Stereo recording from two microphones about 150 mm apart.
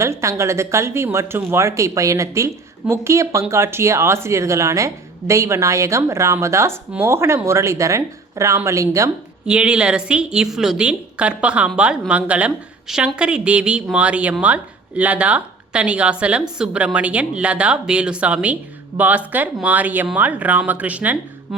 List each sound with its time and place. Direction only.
0.0 s speech: 20° right (ahead or behind)
9.5 s speech: 5° right (ahead or behind)